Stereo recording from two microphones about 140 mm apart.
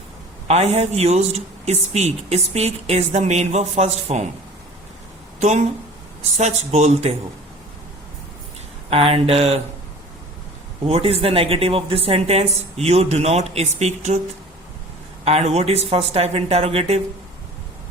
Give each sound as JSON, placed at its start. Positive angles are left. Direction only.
{"t": 0.4, "sound": "a man's voice", "side_deg": -50}
{"t": 5.4, "sound": "a man's voice", "side_deg": -55}
{"t": 8.9, "sound": "a man's voice", "side_deg": -45}
{"t": 10.8, "sound": "a man's voice", "side_deg": -45}
{"t": 15.2, "sound": "a man's voice", "side_deg": -50}